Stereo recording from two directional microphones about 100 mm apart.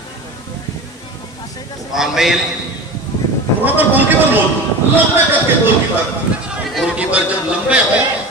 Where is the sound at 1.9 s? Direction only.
5° right (ahead or behind).